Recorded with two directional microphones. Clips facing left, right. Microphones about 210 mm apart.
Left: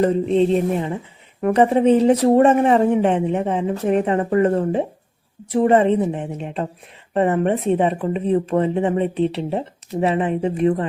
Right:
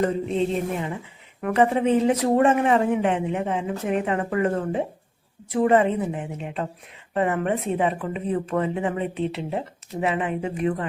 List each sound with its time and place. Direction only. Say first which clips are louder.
0.0 s speech: left 6 dB; 35° left (ahead or behind)